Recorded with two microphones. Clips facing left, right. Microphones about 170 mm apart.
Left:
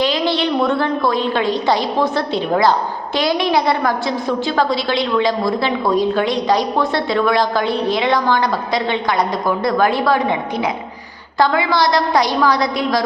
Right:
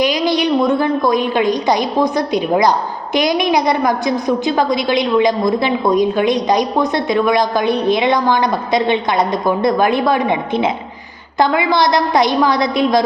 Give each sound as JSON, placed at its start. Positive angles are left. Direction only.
{"t": 0.0, "sound": "a woman's voice", "side_deg": -15}